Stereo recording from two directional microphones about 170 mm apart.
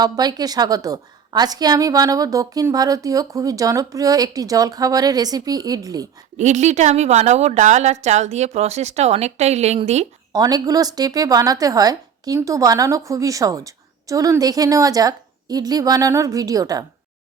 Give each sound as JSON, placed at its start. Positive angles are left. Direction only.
{"t": 0.0, "sound": "a woman's voice", "side_deg": -25}
{"t": 6.3, "sound": "a woman's voice", "side_deg": -45}
{"t": 10.3, "sound": "a woman's voice", "side_deg": -20}